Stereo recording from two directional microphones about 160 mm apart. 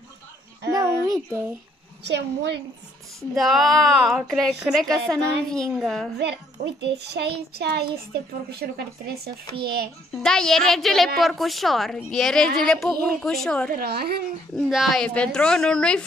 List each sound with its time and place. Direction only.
0.7 s a sound: 25° right (ahead or behind)
2.0 s a child's voice: 90° right
3.2 s speech: centre (ahead or behind)
6.1 s a child's voice: 90° right
10.1 s speech: 5° left (ahead or behind)
13.7 s a woman's voice: 70° right (ahead or behind)
14.5 s speech: centre (ahead or behind)